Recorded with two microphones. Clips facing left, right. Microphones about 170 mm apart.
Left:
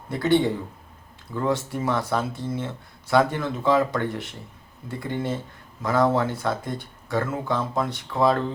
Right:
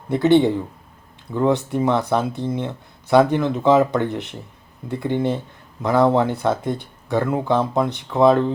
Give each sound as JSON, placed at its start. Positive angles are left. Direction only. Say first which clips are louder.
{"t": 0.1, "sound": "speech", "louder": "right 6 dB", "side_deg": -20}